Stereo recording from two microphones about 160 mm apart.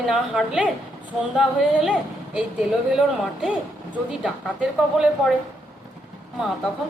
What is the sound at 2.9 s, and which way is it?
A woman's voice, 5° right (ahead or behind).